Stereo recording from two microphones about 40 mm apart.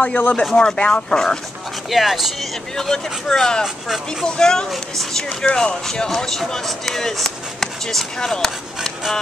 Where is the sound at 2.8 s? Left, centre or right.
Centre.